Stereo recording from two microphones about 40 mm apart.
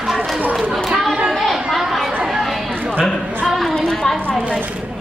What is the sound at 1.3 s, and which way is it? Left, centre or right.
Chatter, centre.